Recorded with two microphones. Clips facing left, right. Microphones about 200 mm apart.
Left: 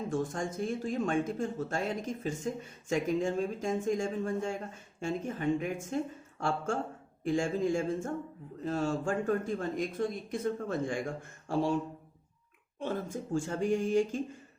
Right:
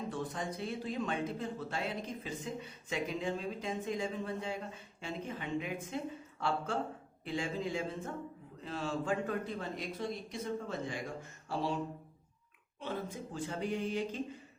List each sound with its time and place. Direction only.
0.1 s speech: 45° left (ahead or behind)
12.8 s speech: 45° left (ahead or behind)